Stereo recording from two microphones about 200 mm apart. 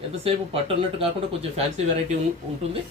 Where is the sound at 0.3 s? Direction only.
30° right (ahead or behind).